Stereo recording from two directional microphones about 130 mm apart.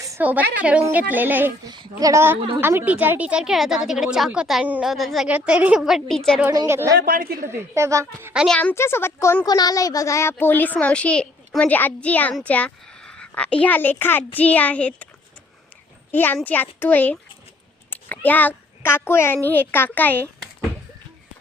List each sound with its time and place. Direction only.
0.2 s a woman's voice: 10° right (ahead or behind)
1.6 s a woman's voice: 35° right (ahead or behind); by 6.4 s 5° left (ahead or behind)
6.7 s a woman's voice: 20° right (ahead or behind)
7.1 s a woman's voice: 90° right
7.8 s a woman's voice: 20° right (ahead or behind)
8.4 s a woman's voice: 10° left (ahead or behind)
8.7 s speech: 20° left (ahead or behind)
9.5 s a woman's voice: 30° left (ahead or behind); by 15.0 s 10° left (ahead or behind)
16.1 s a woman's voice: 15° left (ahead or behind)